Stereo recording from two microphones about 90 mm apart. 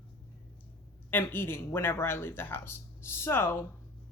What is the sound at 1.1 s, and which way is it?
Speech, 25° left (ahead or behind).